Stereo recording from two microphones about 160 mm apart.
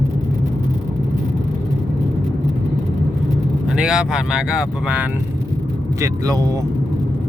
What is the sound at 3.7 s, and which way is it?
Speech, 5° right (ahead or behind).